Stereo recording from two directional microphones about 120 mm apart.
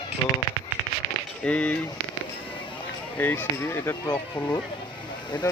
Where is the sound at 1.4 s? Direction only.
10° left (ahead or behind).